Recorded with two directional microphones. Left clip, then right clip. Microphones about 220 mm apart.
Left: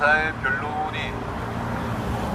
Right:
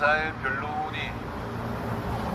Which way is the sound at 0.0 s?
Centre (ahead or behind).